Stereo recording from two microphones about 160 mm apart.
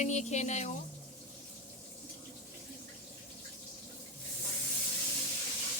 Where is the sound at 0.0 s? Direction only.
45° left (ahead or behind).